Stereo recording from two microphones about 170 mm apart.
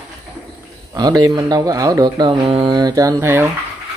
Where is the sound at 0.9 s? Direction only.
20° right (ahead or behind).